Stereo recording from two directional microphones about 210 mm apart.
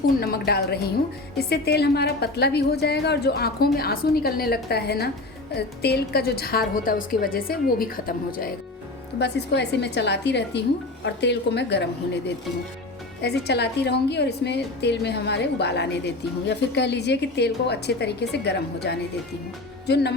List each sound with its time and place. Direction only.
0.2 s a woman's voice: 50° left (ahead or behind)
9.1 s a woman's voice: 55° left (ahead or behind)
13.2 s a woman's voice: 50° left (ahead or behind)